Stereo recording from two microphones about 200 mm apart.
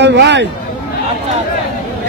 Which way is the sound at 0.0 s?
60° right (ahead or behind).